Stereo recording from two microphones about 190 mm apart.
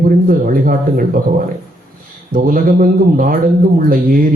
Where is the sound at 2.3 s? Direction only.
50° right (ahead or behind).